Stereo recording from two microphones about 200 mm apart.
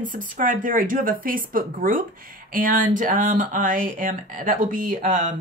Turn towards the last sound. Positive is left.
turn(degrees=-40)  # may be behind; listen again after turning